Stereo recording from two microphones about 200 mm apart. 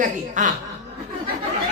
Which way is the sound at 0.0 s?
40° right (ahead or behind).